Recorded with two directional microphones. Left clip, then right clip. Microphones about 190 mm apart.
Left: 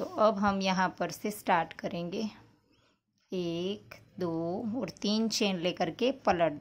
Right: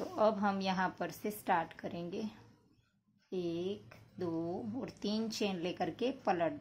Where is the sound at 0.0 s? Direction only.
20° left (ahead or behind).